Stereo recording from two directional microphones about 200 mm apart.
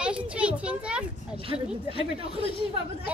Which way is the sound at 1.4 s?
25° right (ahead or behind).